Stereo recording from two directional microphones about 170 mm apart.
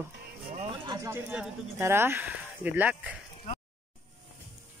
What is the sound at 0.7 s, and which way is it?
Music, 25° right (ahead or behind).